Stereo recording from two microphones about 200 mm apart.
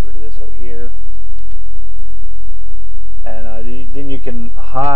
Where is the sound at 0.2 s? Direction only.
20° right (ahead or behind).